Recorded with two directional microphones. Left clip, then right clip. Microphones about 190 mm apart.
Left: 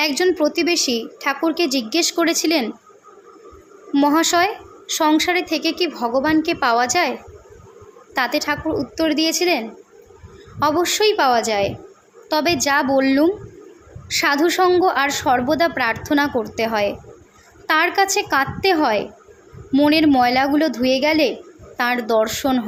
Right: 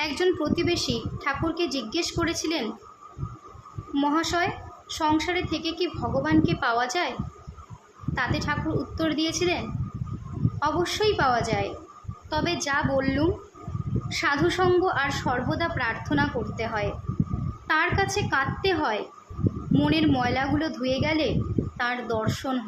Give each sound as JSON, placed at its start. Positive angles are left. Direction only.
{"t": 0.0, "sound": "a woman's voice", "side_deg": 35}
{"t": 3.9, "sound": "a woman's voice", "side_deg": 40}
{"t": 8.1, "sound": "a woman's voice", "side_deg": 40}